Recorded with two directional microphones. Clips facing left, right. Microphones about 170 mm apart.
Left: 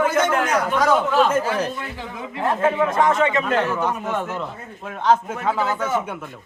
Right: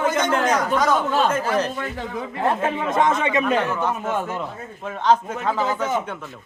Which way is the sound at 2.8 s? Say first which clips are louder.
Left 1 dB; 20° right (ahead or behind).